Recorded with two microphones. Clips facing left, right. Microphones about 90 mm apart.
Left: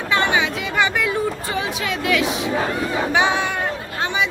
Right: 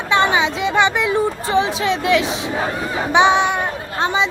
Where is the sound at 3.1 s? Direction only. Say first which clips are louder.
Right 8 dB; 20° right (ahead or behind).